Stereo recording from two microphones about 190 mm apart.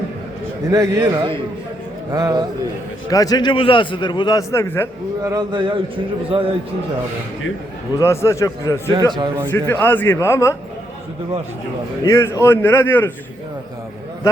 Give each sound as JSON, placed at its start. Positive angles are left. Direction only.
{"t": 0.7, "sound": "a man's voice", "side_deg": -15}
{"t": 3.1, "sound": "a man's voice", "side_deg": 20}
{"t": 5.2, "sound": "speech", "side_deg": -20}
{"t": 7.9, "sound": "a man's voice", "side_deg": 15}
{"t": 9.1, "sound": "speech", "side_deg": -25}
{"t": 9.5, "sound": "a man's voice", "side_deg": 10}
{"t": 12.0, "sound": "a man's voice", "side_deg": 15}